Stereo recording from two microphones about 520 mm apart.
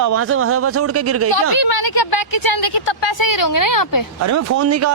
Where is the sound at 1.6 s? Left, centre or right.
Left.